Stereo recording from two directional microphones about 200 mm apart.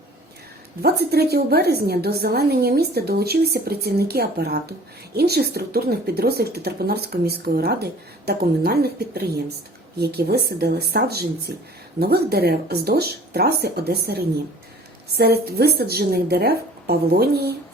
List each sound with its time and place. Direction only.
0.8 s a woman's voice: 50° right (ahead or behind)
15.2 s a woman's voice: 50° right (ahead or behind)